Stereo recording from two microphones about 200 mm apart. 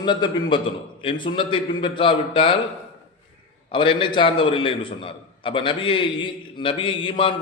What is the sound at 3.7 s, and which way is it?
A man's voice, 25° left (ahead or behind).